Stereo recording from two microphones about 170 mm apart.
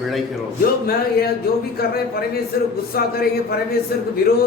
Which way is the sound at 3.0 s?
65° left (ahead or behind).